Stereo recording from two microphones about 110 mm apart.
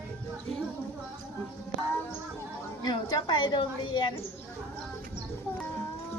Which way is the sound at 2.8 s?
45° left (ahead or behind).